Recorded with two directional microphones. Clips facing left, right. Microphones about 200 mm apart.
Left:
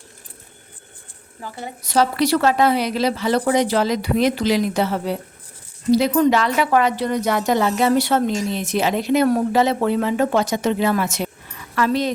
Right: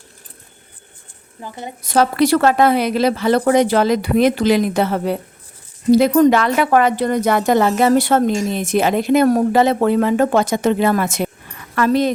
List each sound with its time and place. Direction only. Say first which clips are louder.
1.4 s a woman's voice: right 2 dB; 20° right (ahead or behind)
1.8 s a woman's voice: right 3 dB; 50° right (ahead or behind)